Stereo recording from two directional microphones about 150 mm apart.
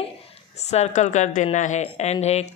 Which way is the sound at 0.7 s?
50° left (ahead or behind).